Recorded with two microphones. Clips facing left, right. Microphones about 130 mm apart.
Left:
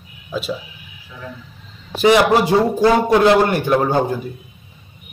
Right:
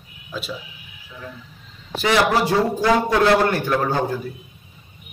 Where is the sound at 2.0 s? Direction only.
20° left (ahead or behind).